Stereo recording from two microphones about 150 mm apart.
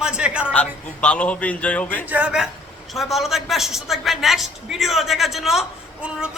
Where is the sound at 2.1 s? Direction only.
10° right (ahead or behind).